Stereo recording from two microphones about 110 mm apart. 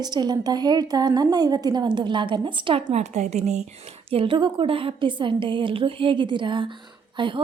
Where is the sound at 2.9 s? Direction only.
90° right.